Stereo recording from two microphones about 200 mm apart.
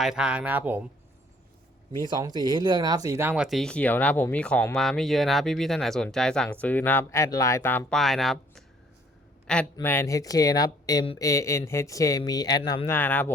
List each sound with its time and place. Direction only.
0.0 s speech: 5° right (ahead or behind)
2.1 s speech: 20° right (ahead or behind); by 8.6 s centre (ahead or behind)
9.7 s speech: 10° left (ahead or behind)